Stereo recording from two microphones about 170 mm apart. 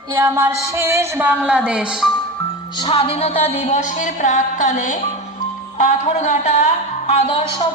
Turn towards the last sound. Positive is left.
turn(degrees=40)  # may be behind; listen again after turning